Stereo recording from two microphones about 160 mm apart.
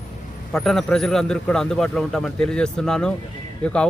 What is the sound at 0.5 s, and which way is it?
Speech, 5° left (ahead or behind).